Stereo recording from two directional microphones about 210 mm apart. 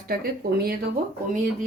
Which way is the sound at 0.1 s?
45° right (ahead or behind).